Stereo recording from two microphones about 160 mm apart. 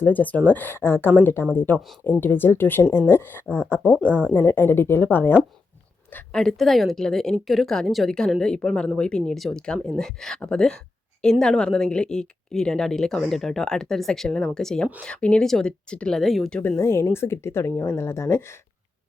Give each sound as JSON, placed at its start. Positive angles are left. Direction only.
{"t": 0.0, "sound": "a woman's voice", "side_deg": 10}